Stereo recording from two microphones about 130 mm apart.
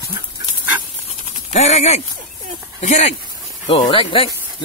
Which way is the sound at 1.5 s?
60° left (ahead or behind).